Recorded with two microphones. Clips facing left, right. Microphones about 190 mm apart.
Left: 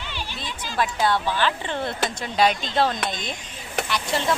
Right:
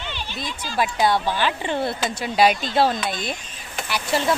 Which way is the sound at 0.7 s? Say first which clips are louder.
Right 2 dB; 10° right (ahead or behind).